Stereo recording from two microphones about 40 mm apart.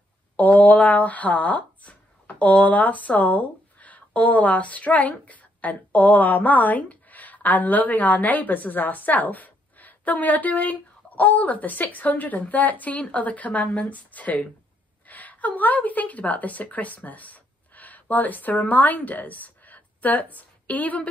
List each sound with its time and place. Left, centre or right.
0.4 s a woman's voice: left